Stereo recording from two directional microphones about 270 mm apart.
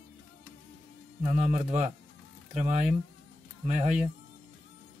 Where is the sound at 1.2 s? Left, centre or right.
Right.